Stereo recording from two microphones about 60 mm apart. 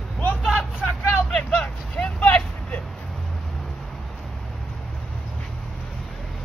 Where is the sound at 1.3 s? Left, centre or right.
Centre.